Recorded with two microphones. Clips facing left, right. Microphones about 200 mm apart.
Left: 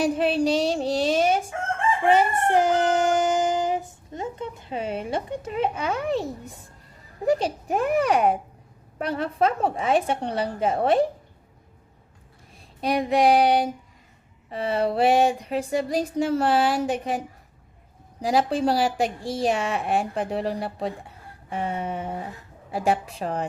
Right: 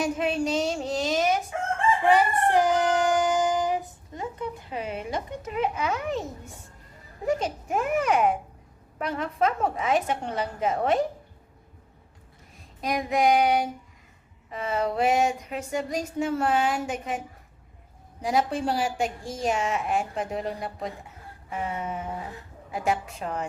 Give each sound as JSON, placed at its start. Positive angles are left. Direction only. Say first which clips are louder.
{"t": 0.0, "sound": "a sound", "louder": "left 4 dB", "side_deg": 35}
{"t": 2.0, "sound": "child singing", "louder": "left 2 dB", "side_deg": 25}
{"t": 7.3, "sound": "a woman's voice", "louder": "left 4 dB", "side_deg": 35}
{"t": 12.8, "sound": "a woman's voice", "louder": "left 4 dB", "side_deg": 30}
{"t": 21.5, "sound": "a sound", "louder": "left 3 dB", "side_deg": 30}
{"t": 22.7, "sound": "a woman's voice", "louder": "left 3 dB", "side_deg": 35}